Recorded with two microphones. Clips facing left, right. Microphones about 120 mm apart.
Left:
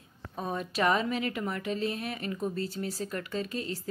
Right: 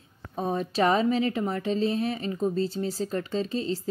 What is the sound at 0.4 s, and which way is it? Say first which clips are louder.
A woman's voice: right 5 dB; 30° right (ahead or behind).